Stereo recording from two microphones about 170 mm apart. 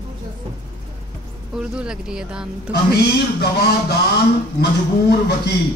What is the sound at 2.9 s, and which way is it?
Speech, 70° left (ahead or behind).